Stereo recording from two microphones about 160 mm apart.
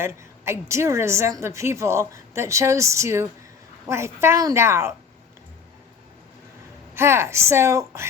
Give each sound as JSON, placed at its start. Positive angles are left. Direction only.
{"t": 0.0, "sound": "a woman's voice", "side_deg": -15}
{"t": 6.9, "sound": "a woman's voice", "side_deg": -15}